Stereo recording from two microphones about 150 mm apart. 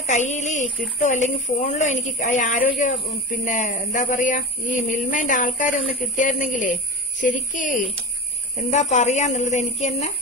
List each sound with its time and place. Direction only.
0.0 s speech: 50° left (ahead or behind)